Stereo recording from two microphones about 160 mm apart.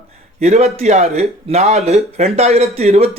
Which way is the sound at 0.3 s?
40° right (ahead or behind).